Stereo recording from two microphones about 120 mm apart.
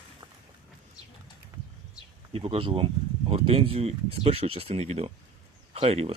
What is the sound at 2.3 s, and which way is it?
Speech, 55° right (ahead or behind).